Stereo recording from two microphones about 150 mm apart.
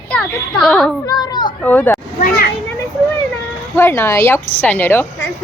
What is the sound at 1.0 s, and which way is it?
Speech, 25° left (ahead or behind).